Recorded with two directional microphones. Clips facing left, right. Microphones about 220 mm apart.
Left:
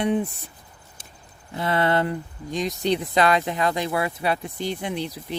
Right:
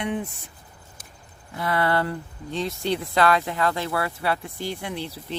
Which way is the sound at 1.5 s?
25° left (ahead or behind).